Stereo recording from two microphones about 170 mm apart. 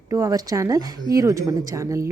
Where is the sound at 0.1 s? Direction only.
20° right (ahead or behind).